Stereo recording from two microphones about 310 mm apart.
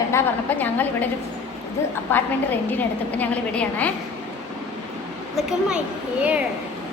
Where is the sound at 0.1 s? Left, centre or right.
Centre.